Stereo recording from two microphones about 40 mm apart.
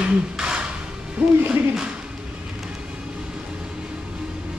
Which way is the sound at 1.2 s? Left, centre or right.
Centre.